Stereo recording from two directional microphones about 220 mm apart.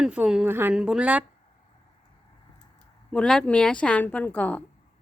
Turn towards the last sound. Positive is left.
turn(degrees=5)  # may be behind; listen again after turning